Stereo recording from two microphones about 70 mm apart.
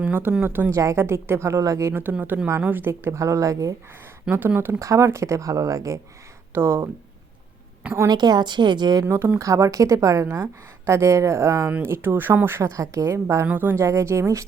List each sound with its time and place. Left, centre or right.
0.4 s speech: right
0.7 s speech: right
1.0 s speech: right
1.9 s speech: right
3.2 s speech: right
4.3 s speech: right
4.8 s speech: right
6.5 s speech: right
8.0 s speech: right
9.0 s speech: right
13.1 s speech: right
13.7 s speech: right